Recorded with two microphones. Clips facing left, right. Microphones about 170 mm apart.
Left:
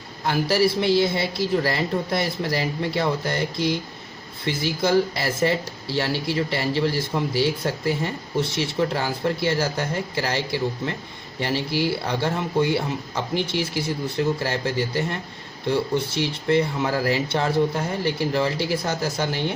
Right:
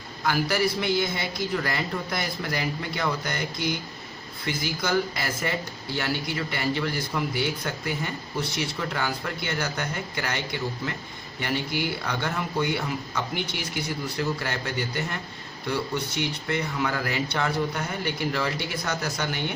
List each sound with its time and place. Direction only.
0.3 s speech: 30° left (ahead or behind)